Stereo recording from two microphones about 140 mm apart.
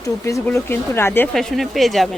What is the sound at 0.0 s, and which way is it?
Speech, 20° left (ahead or behind).